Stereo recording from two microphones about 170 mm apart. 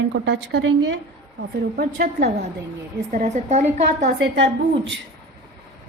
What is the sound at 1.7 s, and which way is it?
Speech, 60° right (ahead or behind).